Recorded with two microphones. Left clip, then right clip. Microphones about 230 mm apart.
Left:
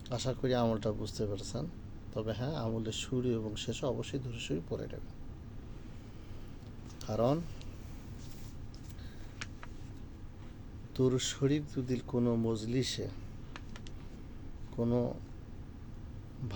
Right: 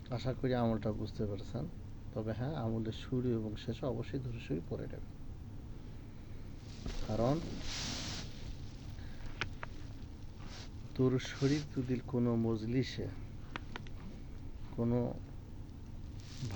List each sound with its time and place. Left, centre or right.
0.1 s speech: centre
7.1 s speech: centre
9.4 s a sound: centre
10.9 s speech: centre
14.8 s speech: centre